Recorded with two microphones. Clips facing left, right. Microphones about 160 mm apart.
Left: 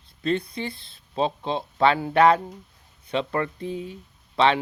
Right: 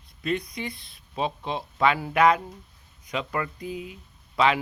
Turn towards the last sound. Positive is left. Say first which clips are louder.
# left 2 dB
turn(degrees=30)  # may be behind; listen again after turning